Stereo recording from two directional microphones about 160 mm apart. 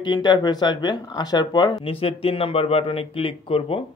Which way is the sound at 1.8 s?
35° left (ahead or behind).